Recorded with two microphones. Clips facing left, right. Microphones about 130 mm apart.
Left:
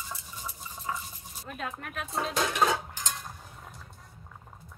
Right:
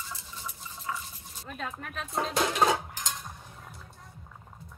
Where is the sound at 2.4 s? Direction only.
25° right (ahead or behind).